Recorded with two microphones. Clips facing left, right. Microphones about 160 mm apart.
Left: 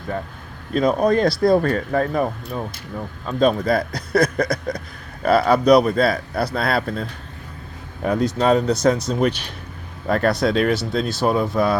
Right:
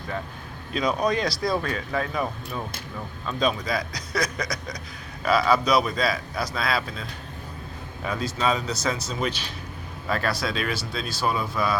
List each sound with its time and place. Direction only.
0.7 s a man's voice: 50° left (ahead or behind)